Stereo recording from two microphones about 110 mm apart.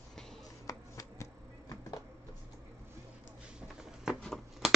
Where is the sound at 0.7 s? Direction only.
30° left (ahead or behind).